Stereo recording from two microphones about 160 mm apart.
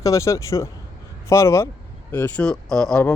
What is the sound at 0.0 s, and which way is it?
A man's voice, 20° left (ahead or behind).